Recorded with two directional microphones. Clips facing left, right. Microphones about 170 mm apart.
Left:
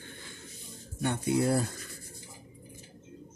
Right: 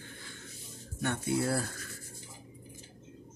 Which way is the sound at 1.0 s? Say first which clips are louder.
Left 3 dB; 15° left (ahead or behind).